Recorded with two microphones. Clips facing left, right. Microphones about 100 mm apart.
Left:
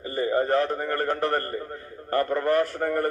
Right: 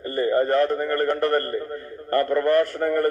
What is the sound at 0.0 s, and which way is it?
A man's voice, 15° left (ahead or behind).